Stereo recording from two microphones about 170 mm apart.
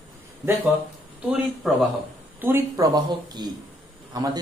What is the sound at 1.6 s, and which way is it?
Speech, 5° right (ahead or behind).